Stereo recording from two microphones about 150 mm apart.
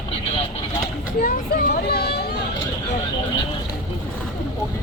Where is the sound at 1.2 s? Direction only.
75° left (ahead or behind); by 2.3 s 90° left.